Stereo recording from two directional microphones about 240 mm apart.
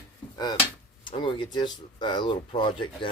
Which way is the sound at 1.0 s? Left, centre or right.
Centre.